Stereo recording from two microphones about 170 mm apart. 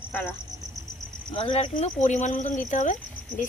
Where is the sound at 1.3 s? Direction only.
30° left (ahead or behind).